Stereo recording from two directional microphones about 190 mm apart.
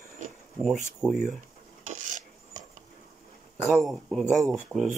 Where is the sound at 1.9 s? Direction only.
40° right (ahead or behind).